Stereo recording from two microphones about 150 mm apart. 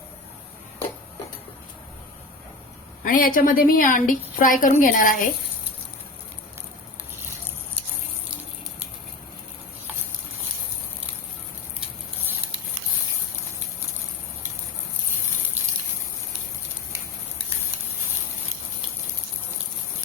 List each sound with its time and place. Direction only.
3.0 s a woman's voice: 65° left (ahead or behind)